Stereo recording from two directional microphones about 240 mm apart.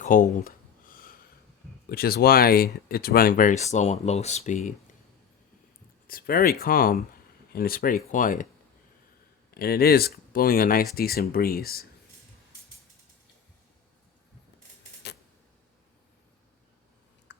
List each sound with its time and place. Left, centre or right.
0.0 s a sound: left
1.9 s speech: left
6.1 s speech: left
9.6 s speech: left